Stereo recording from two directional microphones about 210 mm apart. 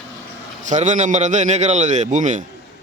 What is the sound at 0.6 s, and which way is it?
A man's voice, 35° right (ahead or behind).